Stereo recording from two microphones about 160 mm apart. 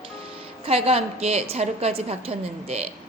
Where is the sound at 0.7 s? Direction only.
40° right (ahead or behind).